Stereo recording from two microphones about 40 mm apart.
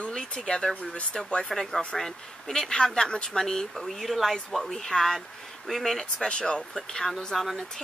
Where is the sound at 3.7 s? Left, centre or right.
Centre.